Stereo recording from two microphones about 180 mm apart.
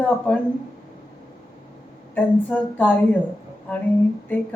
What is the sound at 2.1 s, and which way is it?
A woman's voice, 10° left (ahead or behind).